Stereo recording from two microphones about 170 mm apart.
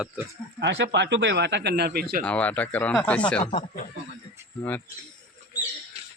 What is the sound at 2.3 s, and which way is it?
Speech, 10° left (ahead or behind).